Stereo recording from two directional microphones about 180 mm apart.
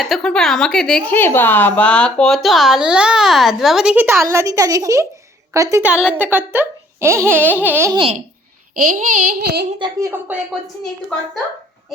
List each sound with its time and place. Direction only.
0.0 s speech: centre (ahead or behind); by 5.9 s 15° right (ahead or behind)
5.9 s speech: 5° right (ahead or behind)
7.9 s speech: 30° right (ahead or behind)
8.7 s child singing: 50° right (ahead or behind)
9.7 s a woman's voice: 25° right (ahead or behind)
10.1 s speech: 10° right (ahead or behind)